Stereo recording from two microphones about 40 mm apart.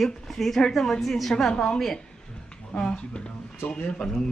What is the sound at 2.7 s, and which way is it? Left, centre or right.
Speech, left.